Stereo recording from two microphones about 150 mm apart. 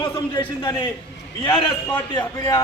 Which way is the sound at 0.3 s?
25° left (ahead or behind).